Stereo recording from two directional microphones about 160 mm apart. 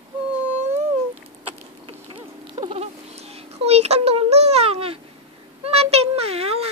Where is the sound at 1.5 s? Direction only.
35° right (ahead or behind).